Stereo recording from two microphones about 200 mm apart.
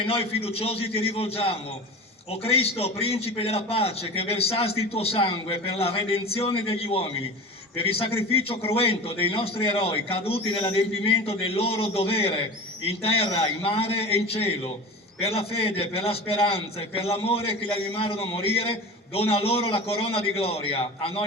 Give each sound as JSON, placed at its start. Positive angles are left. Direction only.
{"t": 0.0, "sound": "a man's voice", "side_deg": 30}